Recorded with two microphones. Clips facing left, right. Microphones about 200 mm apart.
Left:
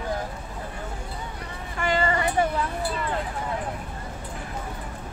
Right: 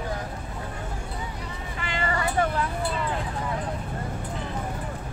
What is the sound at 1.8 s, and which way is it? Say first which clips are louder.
Vehicle: left 8 dB; 45° left (ahead or behind).